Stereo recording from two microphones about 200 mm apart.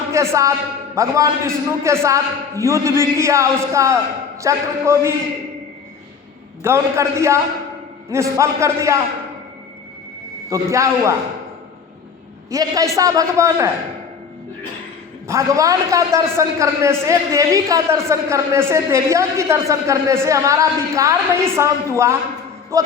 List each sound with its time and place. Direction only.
0.1 s a man's voice: 15° right (ahead or behind)
6.6 s a man's voice: 15° right (ahead or behind)
10.5 s a man's voice: 15° right (ahead or behind)
12.5 s a man's voice: 15° right (ahead or behind)
15.3 s a man's voice: 15° right (ahead or behind)